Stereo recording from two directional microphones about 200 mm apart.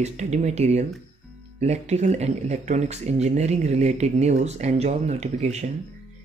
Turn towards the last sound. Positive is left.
turn(degrees=-35)  # may be behind; listen again after turning